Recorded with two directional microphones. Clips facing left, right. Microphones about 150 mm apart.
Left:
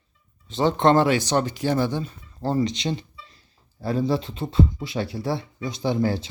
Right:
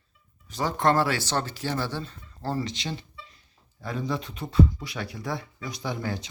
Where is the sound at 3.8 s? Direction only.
35° left (ahead or behind).